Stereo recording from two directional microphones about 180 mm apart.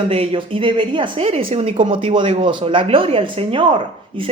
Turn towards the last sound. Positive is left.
turn(degrees=-30)  # may be behind; listen again after turning